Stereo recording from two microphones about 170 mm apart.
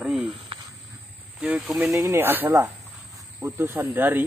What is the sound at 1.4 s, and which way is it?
Speech, 10° right (ahead or behind).